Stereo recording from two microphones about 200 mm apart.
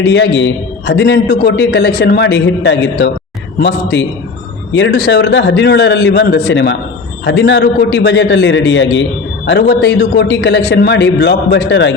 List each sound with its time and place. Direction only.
0.0 s a man's voice: 60° left (ahead or behind)